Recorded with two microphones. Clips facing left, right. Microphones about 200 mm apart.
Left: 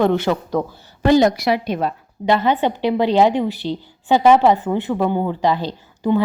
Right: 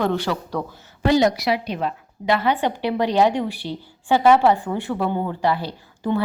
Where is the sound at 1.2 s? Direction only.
50° left (ahead or behind).